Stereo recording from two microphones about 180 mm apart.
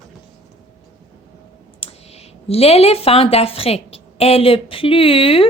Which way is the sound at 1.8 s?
35° left (ahead or behind).